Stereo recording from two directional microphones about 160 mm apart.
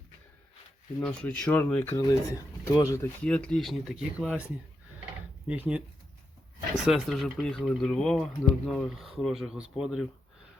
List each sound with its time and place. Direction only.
1.0 s speech: 5° left (ahead or behind)
2.0 s speech: 20° left (ahead or behind)
3.2 s speech: 5° left (ahead or behind)
5.5 s speech: 5° right (ahead or behind)
6.8 s speech: centre (ahead or behind)